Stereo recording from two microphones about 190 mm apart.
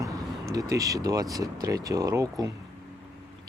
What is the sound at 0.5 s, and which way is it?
Speech, 20° right (ahead or behind).